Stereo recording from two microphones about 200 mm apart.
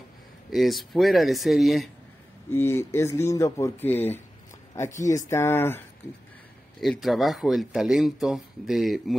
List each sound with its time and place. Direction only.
0.5 s speech: centre (ahead or behind)
2.5 s speech: 10° left (ahead or behind)
6.8 s speech: centre (ahead or behind)